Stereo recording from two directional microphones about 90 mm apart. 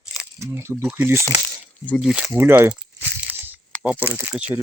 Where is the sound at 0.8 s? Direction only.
15° right (ahead or behind).